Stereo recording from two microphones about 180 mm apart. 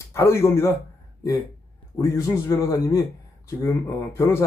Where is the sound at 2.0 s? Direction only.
15° left (ahead or behind).